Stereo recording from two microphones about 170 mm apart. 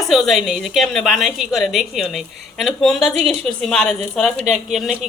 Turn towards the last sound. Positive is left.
turn(degrees=0)  # may be behind; listen again after turning